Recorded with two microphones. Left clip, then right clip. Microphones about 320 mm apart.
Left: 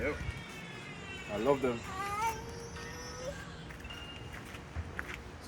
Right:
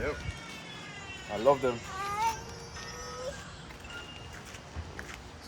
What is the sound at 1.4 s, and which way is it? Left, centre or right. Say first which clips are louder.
Speech: right 5 dB; right.